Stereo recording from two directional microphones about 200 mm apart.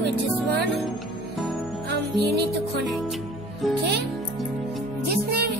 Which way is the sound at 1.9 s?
55° right (ahead or behind).